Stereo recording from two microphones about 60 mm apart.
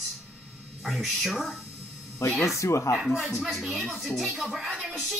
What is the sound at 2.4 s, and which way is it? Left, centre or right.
Speech, left.